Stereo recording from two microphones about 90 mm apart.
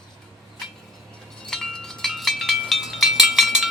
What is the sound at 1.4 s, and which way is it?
Wind chime, 5° left (ahead or behind).